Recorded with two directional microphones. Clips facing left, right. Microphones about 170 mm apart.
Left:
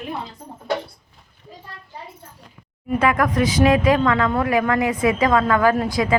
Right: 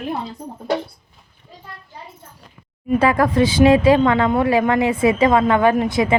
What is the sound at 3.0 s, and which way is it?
A woman's voice, 30° right (ahead or behind).